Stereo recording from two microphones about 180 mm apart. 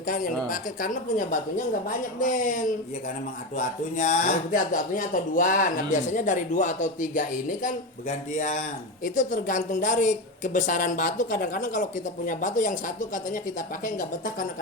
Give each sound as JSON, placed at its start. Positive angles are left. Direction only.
{"t": 0.1, "sound": "speech", "side_deg": 50}